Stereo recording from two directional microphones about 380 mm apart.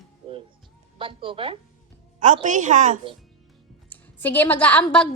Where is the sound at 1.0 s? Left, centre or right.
Centre.